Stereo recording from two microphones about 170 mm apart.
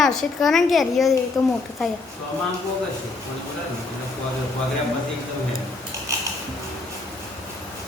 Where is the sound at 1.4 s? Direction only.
20° left (ahead or behind).